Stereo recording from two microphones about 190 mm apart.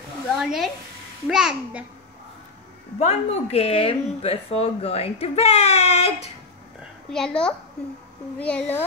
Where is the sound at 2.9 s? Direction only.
35° left (ahead or behind).